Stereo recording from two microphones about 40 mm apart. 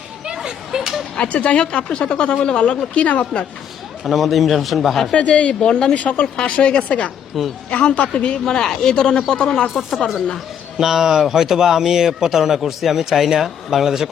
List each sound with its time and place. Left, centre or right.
0.4 s a sound: centre
1.1 s speech: left
4.0 s speech: centre
5.1 s speech: left
7.3 s speech: centre
7.7 s speech: left
8.4 s speech: centre
10.8 s speech: centre